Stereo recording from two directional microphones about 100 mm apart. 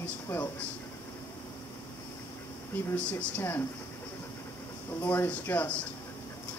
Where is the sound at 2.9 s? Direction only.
15° left (ahead or behind).